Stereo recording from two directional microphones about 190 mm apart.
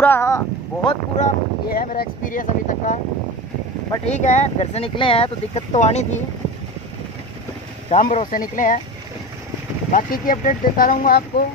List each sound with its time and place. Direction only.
0.0 s a sound: 10° left (ahead or behind)
1.1 s speech: 45° left (ahead or behind)
4.0 s speech: 40° left (ahead or behind)
7.9 s speech: 40° left (ahead or behind)
9.9 s speech: 45° left (ahead or behind)